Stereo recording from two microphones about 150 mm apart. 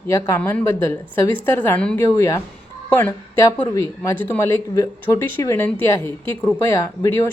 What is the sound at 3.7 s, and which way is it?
A woman's voice, 20° left (ahead or behind).